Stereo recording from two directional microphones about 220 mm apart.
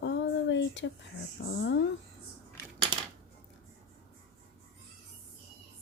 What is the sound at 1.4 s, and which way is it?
Speech, 45° left (ahead or behind).